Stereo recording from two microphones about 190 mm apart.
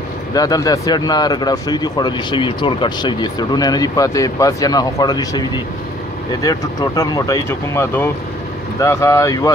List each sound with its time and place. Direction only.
0.3 s speech: 20° left (ahead or behind)
6.4 s speech: 20° left (ahead or behind)